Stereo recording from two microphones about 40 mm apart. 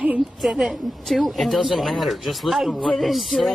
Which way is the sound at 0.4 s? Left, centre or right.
Centre.